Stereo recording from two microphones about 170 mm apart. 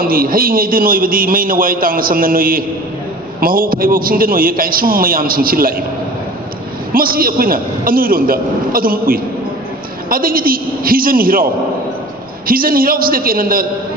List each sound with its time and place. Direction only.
0.0 s a man's voice: 55° right (ahead or behind)
6.9 s a man's voice: 60° right (ahead or behind)
12.5 s a man's voice: 55° right (ahead or behind)